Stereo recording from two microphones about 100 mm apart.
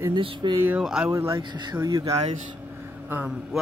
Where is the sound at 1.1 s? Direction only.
30° right (ahead or behind).